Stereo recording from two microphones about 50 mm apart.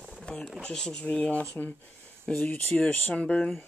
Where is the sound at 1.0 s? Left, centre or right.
Left.